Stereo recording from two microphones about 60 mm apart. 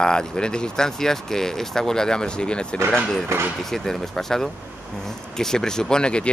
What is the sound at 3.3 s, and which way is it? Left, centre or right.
Speech, right.